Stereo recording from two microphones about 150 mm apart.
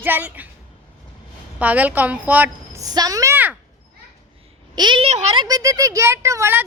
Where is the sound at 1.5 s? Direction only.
10° right (ahead or behind).